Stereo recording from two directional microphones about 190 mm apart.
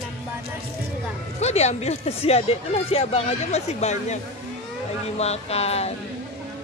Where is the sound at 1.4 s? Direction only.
35° left (ahead or behind).